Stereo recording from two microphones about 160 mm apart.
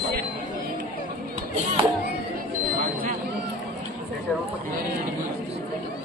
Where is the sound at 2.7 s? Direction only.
60° right (ahead or behind).